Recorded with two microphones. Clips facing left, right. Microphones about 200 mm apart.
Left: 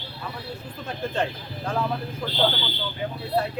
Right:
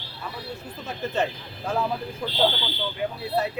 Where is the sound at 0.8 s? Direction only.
5° right (ahead or behind).